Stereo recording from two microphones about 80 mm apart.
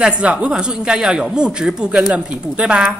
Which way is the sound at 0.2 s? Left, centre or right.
Centre.